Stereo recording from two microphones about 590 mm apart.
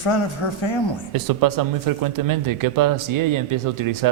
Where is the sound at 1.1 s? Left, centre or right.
Right.